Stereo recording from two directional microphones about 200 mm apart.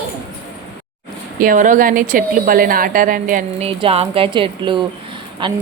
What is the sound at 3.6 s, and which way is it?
A woman's voice, 30° right (ahead or behind).